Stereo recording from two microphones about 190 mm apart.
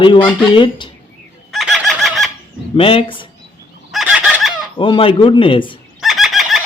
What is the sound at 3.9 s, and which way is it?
Fowl, 5° right (ahead or behind).